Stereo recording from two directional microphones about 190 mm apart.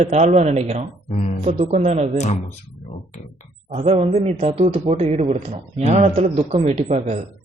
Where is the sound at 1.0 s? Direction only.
35° left (ahead or behind).